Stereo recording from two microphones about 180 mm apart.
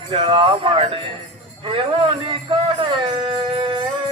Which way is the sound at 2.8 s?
30° right (ahead or behind).